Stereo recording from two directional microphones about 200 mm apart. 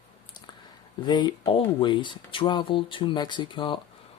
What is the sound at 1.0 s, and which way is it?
Speech, 20° left (ahead or behind).